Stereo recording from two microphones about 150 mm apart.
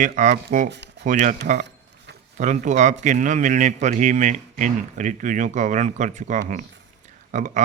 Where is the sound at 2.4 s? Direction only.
55° right (ahead or behind).